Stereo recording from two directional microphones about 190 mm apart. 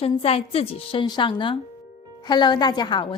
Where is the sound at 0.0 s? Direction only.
30° left (ahead or behind).